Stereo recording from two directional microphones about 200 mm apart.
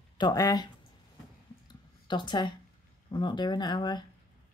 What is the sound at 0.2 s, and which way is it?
Speech, 20° left (ahead or behind).